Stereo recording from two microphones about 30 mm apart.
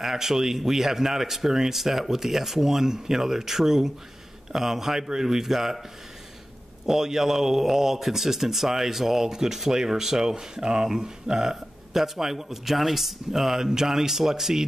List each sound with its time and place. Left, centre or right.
0.0 s speech: centre
6.9 s speech: centre